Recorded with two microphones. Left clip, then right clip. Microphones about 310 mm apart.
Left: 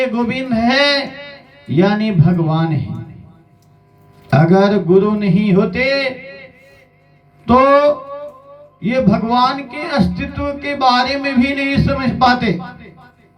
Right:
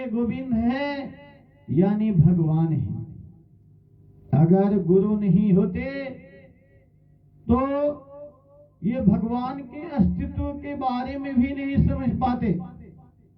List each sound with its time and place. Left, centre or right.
0.0 s a man's voice: left
4.3 s a man's voice: left
7.4 s a man's voice: left